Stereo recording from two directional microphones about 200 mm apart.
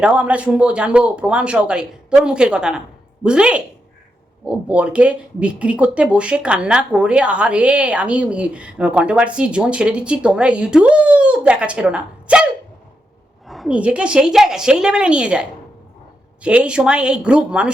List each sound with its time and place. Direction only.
0.0 s speech: 5° right (ahead or behind)
13.5 s speech: centre (ahead or behind)
16.4 s speech: 5° right (ahead or behind)